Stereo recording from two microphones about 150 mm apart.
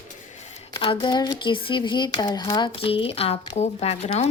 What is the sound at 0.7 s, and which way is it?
Speech, 30° left (ahead or behind).